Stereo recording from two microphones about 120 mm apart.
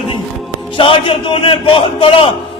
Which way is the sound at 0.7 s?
45° left (ahead or behind).